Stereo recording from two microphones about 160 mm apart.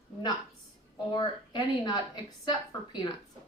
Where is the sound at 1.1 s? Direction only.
30° left (ahead or behind).